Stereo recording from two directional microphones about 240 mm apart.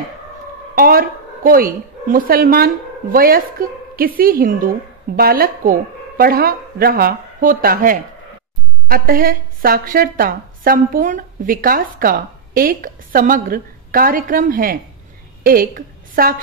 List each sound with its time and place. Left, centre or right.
0.7 s a woman's voice: right